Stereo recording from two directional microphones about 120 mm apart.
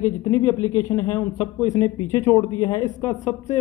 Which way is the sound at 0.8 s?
25° left (ahead or behind).